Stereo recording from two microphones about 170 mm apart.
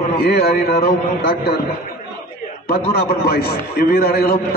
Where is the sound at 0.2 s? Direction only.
65° left (ahead or behind).